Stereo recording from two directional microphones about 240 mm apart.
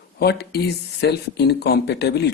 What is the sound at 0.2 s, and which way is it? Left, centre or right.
Speech, left.